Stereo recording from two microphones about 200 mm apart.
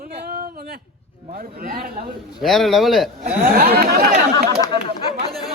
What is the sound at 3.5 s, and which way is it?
Speech, 50° right (ahead or behind).